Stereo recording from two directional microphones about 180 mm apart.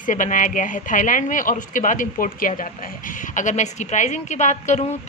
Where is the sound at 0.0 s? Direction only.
45° left (ahead or behind).